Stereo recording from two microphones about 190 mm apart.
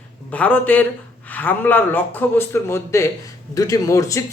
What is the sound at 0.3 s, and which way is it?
Speech, 10° left (ahead or behind).